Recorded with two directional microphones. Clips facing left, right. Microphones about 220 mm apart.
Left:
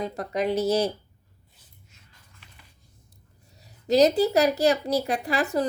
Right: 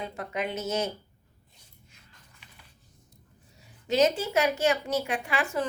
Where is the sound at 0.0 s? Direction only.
40° left (ahead or behind).